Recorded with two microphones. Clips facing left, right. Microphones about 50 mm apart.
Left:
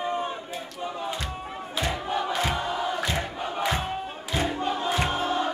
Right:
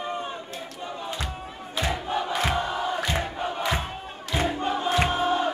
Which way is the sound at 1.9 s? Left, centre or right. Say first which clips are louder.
Right 1 dB; centre.